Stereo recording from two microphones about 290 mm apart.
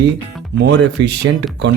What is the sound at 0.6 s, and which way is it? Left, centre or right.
Speech, right.